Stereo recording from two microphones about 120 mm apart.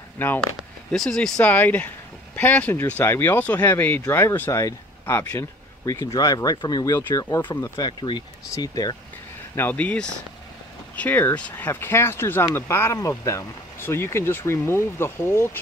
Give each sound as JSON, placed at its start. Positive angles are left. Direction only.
{"t": 0.2, "sound": "speech", "side_deg": 15}
{"t": 0.6, "sound": "speech", "side_deg": 5}
{"t": 6.1, "sound": "speech", "side_deg": 30}
{"t": 9.6, "sound": "speech", "side_deg": 15}